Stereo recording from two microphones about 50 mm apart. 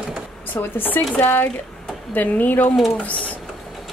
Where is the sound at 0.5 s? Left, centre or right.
Left.